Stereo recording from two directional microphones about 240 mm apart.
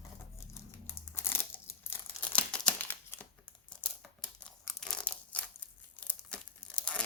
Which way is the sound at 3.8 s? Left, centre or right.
Centre.